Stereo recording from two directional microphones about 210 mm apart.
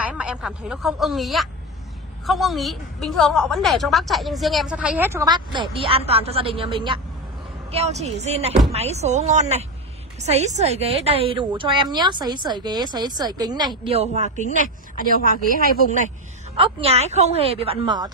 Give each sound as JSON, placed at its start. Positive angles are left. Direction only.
{"t": 0.0, "sound": "a woman's voice", "side_deg": -5}
{"t": 15.3, "sound": "speech", "side_deg": 45}
{"t": 16.5, "sound": "a woman's voice", "side_deg": -25}